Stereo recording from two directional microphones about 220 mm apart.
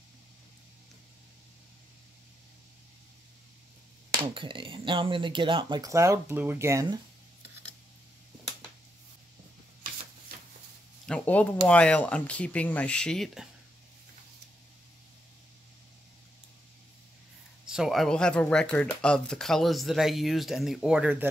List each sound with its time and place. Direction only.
4.3 s speech: 20° right (ahead or behind)
11.1 s speech: 5° left (ahead or behind)
17.6 s speech: centre (ahead or behind)